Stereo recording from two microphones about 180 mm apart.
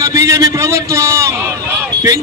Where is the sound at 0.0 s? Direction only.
15° right (ahead or behind).